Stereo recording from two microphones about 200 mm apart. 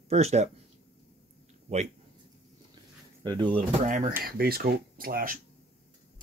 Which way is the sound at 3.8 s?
40° right (ahead or behind).